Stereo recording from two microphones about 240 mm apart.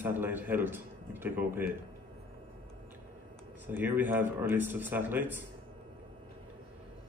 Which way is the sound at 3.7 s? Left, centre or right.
Centre.